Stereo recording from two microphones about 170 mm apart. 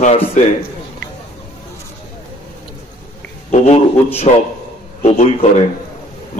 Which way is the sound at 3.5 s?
40° left (ahead or behind).